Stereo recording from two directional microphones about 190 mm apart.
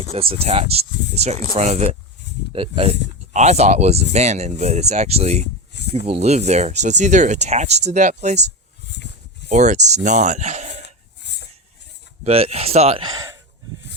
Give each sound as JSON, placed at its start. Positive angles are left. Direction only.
{"t": 0.1, "sound": "speech", "side_deg": -30}
{"t": 5.7, "sound": "a sound", "side_deg": 65}
{"t": 6.1, "sound": "speech", "side_deg": -35}
{"t": 9.5, "sound": "speech", "side_deg": -40}
{"t": 10.8, "sound": "a sound", "side_deg": 60}
{"t": 12.2, "sound": "speech", "side_deg": -30}